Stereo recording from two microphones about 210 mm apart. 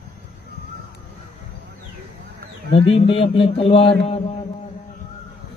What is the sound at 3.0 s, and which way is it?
Speech, 25° left (ahead or behind).